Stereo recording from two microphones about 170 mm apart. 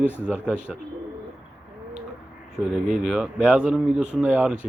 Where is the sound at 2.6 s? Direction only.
5° right (ahead or behind).